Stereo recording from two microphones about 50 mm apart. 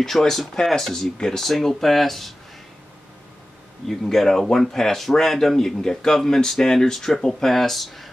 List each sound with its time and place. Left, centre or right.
0.0 s speech: centre
3.8 s speech: centre